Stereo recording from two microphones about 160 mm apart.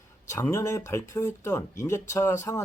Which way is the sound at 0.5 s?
20° left (ahead or behind).